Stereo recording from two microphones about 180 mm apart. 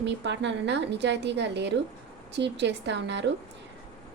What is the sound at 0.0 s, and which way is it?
A woman's voice, 80° right.